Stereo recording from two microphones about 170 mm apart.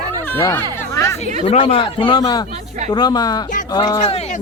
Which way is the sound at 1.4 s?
35° left (ahead or behind).